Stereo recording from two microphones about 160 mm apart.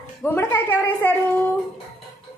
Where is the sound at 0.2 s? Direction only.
10° left (ahead or behind).